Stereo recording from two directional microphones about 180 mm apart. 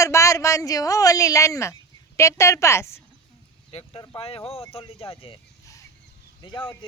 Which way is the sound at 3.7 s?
30° left (ahead or behind).